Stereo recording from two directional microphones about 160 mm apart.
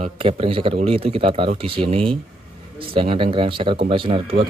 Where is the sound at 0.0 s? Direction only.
35° right (ahead or behind).